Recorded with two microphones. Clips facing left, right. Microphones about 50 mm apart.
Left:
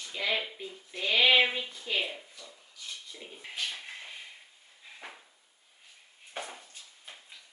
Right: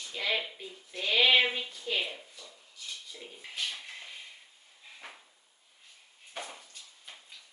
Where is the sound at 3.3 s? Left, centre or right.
Left.